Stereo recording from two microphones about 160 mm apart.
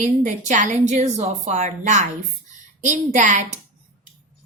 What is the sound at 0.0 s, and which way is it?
A woman's voice, 50° right (ahead or behind).